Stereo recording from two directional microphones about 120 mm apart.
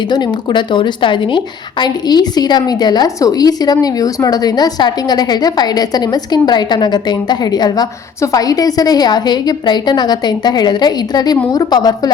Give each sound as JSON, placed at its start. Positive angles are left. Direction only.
{"t": 0.1, "sound": "a woman's voice", "side_deg": 40}